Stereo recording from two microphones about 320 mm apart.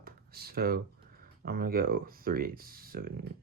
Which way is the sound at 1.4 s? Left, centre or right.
Right.